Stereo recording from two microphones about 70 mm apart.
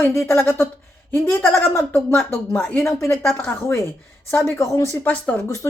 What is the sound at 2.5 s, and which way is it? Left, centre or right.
Speech, centre.